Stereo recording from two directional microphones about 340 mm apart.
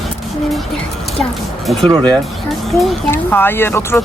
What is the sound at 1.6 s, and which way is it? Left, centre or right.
Speech, centre.